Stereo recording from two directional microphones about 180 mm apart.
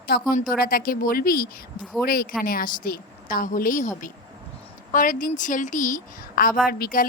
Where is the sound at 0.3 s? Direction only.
55° left (ahead or behind).